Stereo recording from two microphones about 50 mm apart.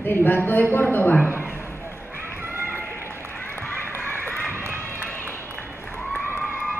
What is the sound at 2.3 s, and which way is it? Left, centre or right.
Run, right.